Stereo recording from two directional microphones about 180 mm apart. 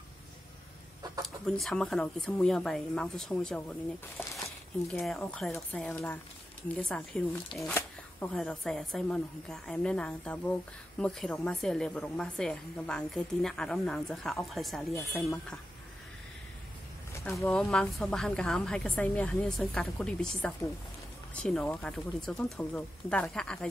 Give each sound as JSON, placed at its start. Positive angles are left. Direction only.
{"t": 1.2, "sound": "a woman's voice", "side_deg": 0}
{"t": 17.5, "sound": "a woman's voice", "side_deg": 5}